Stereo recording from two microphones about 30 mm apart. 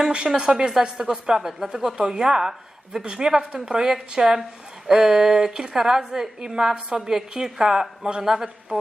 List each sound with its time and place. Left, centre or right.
0.3 s a woman's voice: right
8.2 s a man's voice: centre